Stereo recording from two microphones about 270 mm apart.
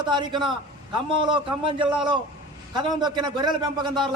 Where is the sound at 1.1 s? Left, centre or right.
Centre.